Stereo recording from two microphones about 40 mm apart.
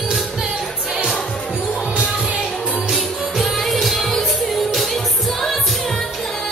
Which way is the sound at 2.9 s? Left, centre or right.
Centre.